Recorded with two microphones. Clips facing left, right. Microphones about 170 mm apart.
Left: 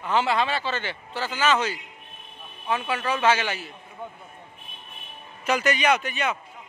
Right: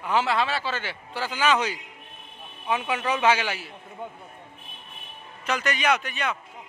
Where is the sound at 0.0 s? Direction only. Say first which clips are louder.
Left 1 dB; 5° right (ahead or behind).